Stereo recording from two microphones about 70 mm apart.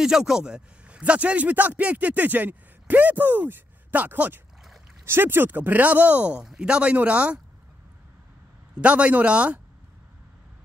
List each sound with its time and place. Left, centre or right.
0.0 s speech: centre
8.8 s speech: centre